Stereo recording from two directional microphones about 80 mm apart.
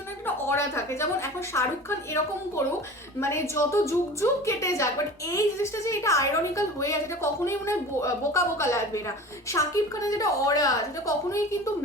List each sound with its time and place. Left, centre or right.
0.3 s a woman's voice: left
3.2 s a woman's voice: left